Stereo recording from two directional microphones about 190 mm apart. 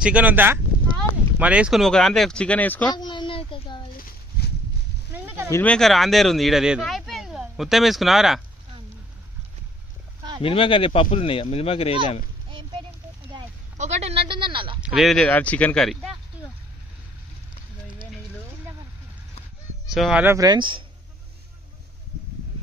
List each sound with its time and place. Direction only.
0.0 s speech: 10° right (ahead or behind); by 2.9 s 10° left (ahead or behind)
3.0 s a sound: 25° left (ahead or behind)
5.1 s a sound: 10° right (ahead or behind)
5.5 s speech: 5° left (ahead or behind)
10.4 s speech: 30° left (ahead or behind)
13.7 s a sound: 35° right (ahead or behind)
14.8 s speech: centre (ahead or behind)
19.9 s speech: centre (ahead or behind)
20.2 s speech: 20° right (ahead or behind)